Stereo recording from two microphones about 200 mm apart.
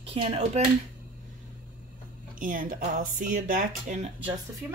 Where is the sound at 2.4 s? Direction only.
45° right (ahead or behind).